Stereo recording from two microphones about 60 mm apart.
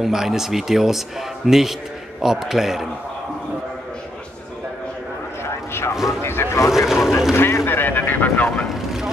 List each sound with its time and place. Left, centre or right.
0.0 s a man's voice: centre
5.4 s a sound: left
6.2 s vehicle: left
6.9 s a man's voice: centre
7.3 s a sound: left
8.6 s vehicle: centre